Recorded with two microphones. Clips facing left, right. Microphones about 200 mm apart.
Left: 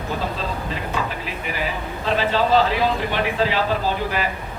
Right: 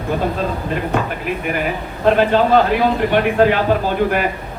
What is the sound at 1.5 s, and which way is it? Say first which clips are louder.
Speech: right 3 dB; 55° right (ahead or behind).